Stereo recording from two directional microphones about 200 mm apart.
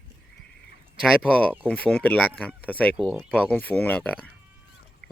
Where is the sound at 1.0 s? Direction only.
5° left (ahead or behind).